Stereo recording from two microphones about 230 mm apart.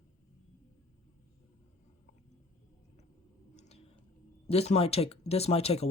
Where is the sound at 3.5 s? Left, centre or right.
Left.